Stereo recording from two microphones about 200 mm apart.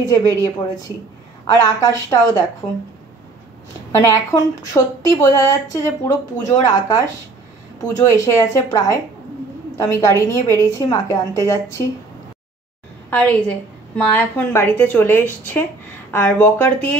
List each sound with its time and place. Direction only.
0.0 s a woman's voice: 15° left (ahead or behind)
3.9 s a woman's voice: 15° left (ahead or behind)
13.1 s a woman's voice: 10° left (ahead or behind)